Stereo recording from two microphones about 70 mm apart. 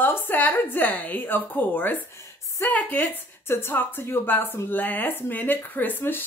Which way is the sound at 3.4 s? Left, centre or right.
Left.